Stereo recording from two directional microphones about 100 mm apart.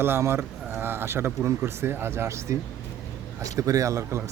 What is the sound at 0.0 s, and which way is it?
A man's voice, 25° right (ahead or behind).